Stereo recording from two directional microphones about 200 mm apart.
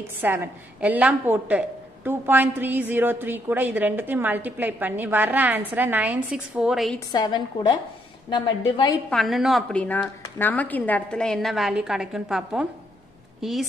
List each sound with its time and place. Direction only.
0.2 s a woman's voice: 10° right (ahead or behind)
7.1 s a woman's voice: 20° left (ahead or behind)
9.1 s a woman's voice: centre (ahead or behind)